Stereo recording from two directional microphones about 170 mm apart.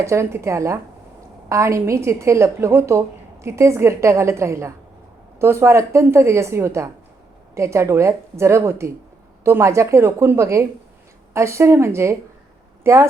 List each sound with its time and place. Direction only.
0.0 s a woman's voice: 15° right (ahead or behind)